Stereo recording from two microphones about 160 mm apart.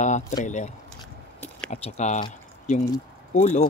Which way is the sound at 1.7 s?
45° left (ahead or behind).